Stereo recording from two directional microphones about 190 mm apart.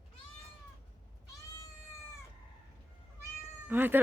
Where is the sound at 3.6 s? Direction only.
10° right (ahead or behind).